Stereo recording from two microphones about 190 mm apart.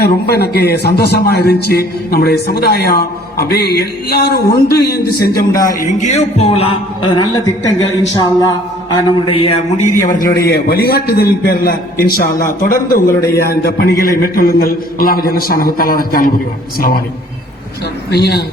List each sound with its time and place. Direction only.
0.0 s a man's voice: 55° left (ahead or behind)
5.9 s a man's voice: 40° left (ahead or behind)
10.0 s a man's voice: 45° left (ahead or behind)
18.1 s a man's voice: 60° left (ahead or behind)